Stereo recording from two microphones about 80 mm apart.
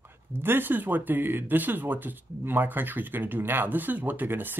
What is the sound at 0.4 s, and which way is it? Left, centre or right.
Speech, right.